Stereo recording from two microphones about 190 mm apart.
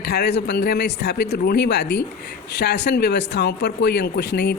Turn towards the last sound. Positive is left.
turn(degrees=60)  # may be behind; listen again after turning